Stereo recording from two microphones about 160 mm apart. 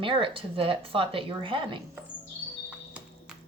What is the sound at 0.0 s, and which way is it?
A woman's voice, 35° right (ahead or behind).